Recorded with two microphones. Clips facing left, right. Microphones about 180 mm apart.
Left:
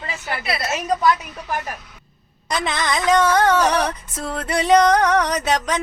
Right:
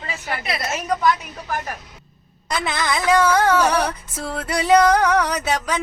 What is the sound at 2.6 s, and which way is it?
Music, 5° right (ahead or behind).